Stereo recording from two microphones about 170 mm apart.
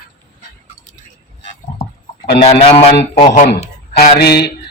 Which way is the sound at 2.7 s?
35° left (ahead or behind).